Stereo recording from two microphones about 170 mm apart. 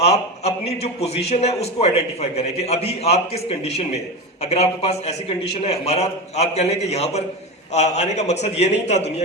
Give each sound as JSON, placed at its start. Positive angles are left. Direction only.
{"t": 0.0, "sound": "a man's voice", "side_deg": 40}